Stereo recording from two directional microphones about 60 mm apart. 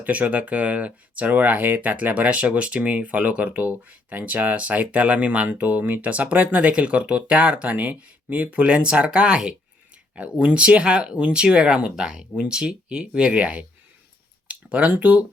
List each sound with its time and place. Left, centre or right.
0.0 s speech: right